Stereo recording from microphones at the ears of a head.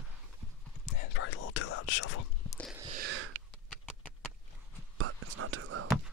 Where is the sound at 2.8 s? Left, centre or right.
Right.